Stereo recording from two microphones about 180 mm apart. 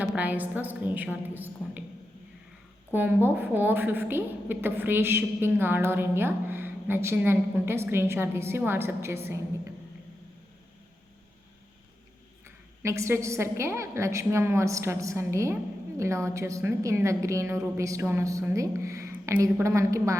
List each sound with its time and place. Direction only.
0.0 s a woman's voice: 10° right (ahead or behind)
2.9 s a woman's voice: 10° right (ahead or behind)
12.8 s a woman's voice: 15° right (ahead or behind)